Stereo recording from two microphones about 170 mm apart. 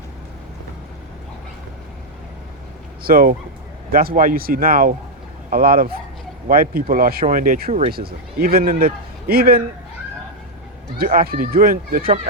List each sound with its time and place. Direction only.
3.0 s speech: 60° right (ahead or behind)
10.9 s speech: 60° right (ahead or behind)